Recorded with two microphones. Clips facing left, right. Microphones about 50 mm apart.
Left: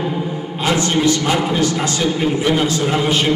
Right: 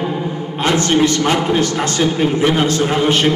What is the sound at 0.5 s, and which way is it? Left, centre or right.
A man's voice, right.